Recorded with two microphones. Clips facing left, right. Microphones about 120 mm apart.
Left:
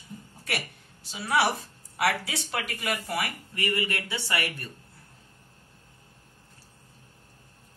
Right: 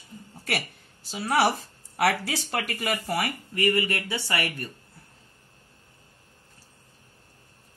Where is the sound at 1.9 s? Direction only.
55° right (ahead or behind).